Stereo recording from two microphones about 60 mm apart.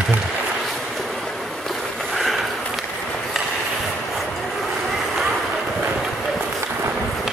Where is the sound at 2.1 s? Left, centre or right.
Centre.